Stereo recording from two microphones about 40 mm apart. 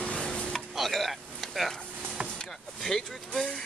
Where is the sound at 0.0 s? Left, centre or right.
Left.